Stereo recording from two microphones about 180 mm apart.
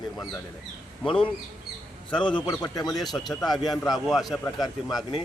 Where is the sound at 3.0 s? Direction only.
Centre (ahead or behind).